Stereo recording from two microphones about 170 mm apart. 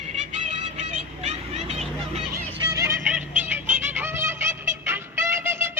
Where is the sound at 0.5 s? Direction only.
40° right (ahead or behind).